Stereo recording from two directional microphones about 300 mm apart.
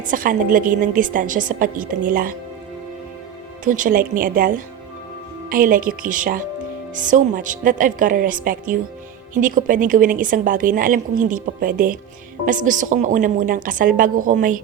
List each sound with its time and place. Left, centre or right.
0.1 s a woman's voice: right
3.6 s a woman's voice: right